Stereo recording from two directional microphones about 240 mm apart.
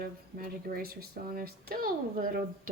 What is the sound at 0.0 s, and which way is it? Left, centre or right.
Speech, right.